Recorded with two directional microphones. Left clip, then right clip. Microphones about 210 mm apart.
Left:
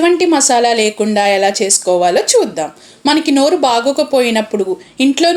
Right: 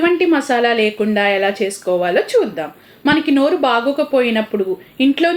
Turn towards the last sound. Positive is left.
turn(degrees=40)  # may be behind; listen again after turning